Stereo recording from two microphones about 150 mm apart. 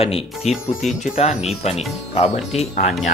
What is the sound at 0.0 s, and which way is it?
Speech, 40° left (ahead or behind).